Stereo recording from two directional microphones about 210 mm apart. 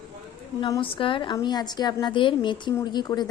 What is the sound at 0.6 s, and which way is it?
A woman's voice, 25° left (ahead or behind).